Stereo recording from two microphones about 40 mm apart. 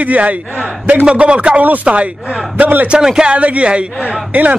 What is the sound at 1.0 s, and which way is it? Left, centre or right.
A man's voice, right.